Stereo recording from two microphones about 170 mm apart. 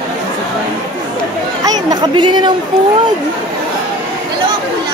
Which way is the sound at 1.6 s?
25° right (ahead or behind).